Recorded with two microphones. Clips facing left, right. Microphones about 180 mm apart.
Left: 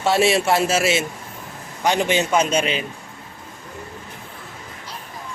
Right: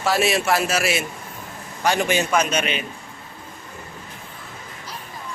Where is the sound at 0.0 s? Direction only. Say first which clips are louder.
Left 3 dB; 25° left (ahead or behind).